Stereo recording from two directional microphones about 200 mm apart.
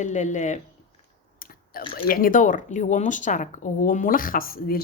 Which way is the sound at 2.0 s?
45° left (ahead or behind).